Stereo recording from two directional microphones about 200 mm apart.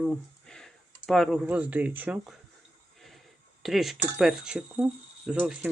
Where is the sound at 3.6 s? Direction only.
Centre (ahead or behind).